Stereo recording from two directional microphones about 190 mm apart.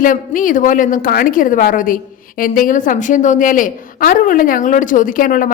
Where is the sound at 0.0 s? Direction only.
45° left (ahead or behind).